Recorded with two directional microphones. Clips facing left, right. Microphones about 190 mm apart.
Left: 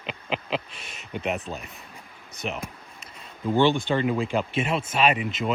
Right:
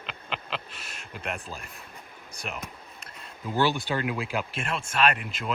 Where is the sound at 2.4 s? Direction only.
Centre (ahead or behind).